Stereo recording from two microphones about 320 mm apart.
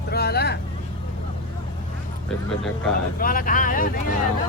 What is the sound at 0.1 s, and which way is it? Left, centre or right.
Vehicle, left.